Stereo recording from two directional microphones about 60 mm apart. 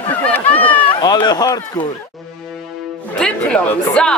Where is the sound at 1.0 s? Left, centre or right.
Left.